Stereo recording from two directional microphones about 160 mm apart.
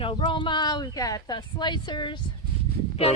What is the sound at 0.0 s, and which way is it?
Speech, 30° left (ahead or behind).